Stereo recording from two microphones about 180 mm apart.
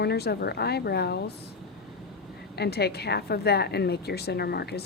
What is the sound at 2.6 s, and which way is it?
A woman's voice, 65° left (ahead or behind).